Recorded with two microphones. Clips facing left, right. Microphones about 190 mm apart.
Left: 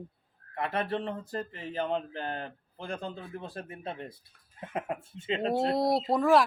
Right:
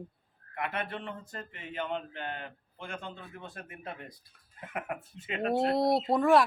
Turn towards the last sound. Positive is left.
turn(degrees=0)  # may be behind; listen again after turning